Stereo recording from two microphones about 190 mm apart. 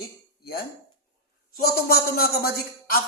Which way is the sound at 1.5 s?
55° left (ahead or behind).